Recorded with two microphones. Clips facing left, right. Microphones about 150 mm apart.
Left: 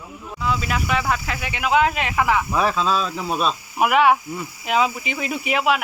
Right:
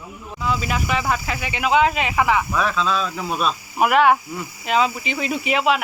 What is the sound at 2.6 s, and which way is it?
Speech, 35° left (ahead or behind).